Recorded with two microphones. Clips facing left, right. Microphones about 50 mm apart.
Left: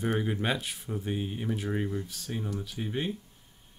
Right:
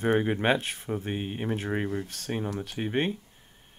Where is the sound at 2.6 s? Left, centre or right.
Right.